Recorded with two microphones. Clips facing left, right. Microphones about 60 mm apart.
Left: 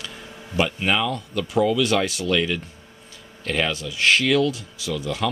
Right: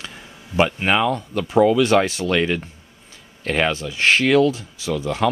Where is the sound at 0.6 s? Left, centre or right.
Right.